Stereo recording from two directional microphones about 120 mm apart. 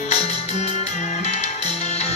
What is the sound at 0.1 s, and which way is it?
Music, 65° left (ahead or behind).